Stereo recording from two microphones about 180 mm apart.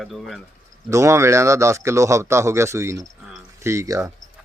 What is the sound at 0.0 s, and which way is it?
Speech, centre (ahead or behind).